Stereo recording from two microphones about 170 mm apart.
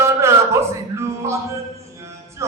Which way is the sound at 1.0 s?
15° right (ahead or behind).